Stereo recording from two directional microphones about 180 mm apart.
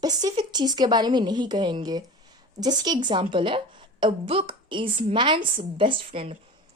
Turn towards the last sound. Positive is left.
turn(degrees=-30)  # may be behind; listen again after turning